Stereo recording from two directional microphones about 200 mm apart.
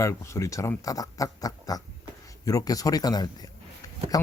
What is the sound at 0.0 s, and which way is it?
Speech, 15° left (ahead or behind).